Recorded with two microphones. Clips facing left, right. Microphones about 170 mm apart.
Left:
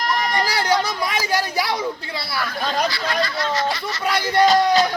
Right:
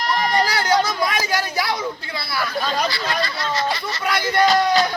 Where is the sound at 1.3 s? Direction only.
30° left (ahead or behind).